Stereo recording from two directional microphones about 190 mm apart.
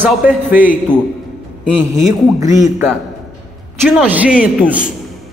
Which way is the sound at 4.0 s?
5° right (ahead or behind).